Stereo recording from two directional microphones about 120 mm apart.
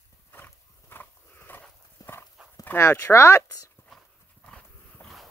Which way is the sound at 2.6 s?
20° left (ahead or behind).